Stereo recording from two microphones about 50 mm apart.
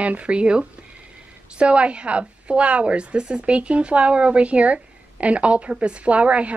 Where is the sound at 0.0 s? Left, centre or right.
Right.